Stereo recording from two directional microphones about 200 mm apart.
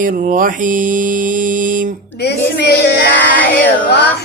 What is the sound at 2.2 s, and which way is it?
Child singing, 55° left (ahead or behind).